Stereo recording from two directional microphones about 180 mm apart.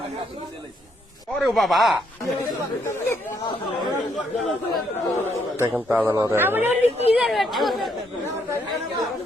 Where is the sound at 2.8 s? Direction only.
15° left (ahead or behind).